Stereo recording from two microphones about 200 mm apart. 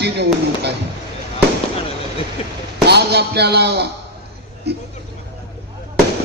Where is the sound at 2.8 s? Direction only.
55° right (ahead or behind).